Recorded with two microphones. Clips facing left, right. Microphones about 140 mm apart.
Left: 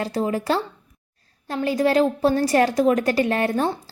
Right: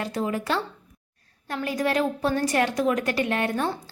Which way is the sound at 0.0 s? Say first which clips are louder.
Left 4 dB; 35° left (ahead or behind).